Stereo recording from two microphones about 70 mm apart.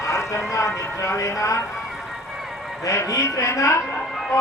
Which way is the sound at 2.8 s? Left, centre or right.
Left.